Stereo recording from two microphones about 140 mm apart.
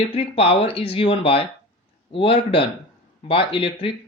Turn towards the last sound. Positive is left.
turn(degrees=40)  # may be behind; listen again after turning